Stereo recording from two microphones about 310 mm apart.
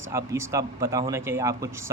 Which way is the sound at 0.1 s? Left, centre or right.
Centre.